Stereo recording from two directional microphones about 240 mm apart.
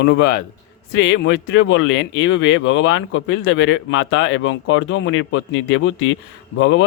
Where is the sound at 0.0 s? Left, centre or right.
Left.